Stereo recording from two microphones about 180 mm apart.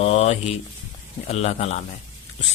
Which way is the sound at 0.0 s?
35° left (ahead or behind).